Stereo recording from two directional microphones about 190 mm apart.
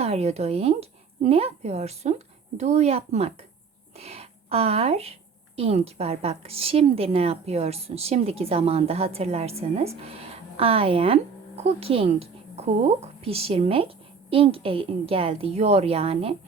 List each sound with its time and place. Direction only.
0.0 s a woman's voice: 35° right (ahead or behind)